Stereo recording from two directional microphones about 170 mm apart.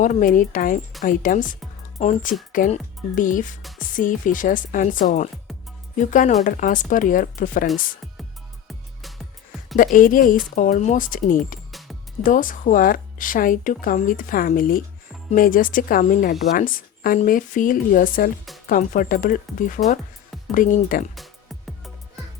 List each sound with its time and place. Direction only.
0.0 s speech: 50° left (ahead or behind)
8.6 s music: centre (ahead or behind)
9.7 s speech: 55° left (ahead or behind)